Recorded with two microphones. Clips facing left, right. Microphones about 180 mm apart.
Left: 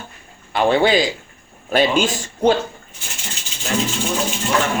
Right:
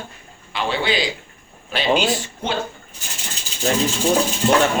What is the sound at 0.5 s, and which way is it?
Speech, 50° left (ahead or behind).